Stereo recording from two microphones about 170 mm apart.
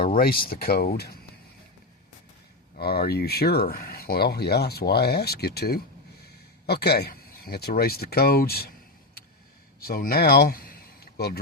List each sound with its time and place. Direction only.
0.1 s speech: 60° left (ahead or behind)
2.7 s speech: 65° left (ahead or behind)
9.8 s speech: 65° left (ahead or behind)